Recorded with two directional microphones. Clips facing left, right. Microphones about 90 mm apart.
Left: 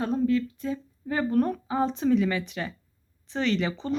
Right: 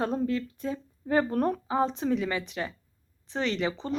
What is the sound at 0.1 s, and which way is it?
Speech, 35° right (ahead or behind).